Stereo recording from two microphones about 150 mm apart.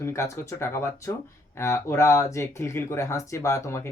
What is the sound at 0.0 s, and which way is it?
Speech, 20° left (ahead or behind).